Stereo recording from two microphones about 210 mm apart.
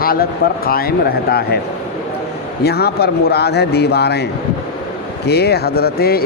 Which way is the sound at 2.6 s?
50° left (ahead or behind).